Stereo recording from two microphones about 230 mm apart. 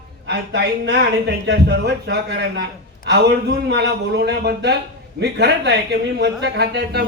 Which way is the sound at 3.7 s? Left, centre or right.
Right.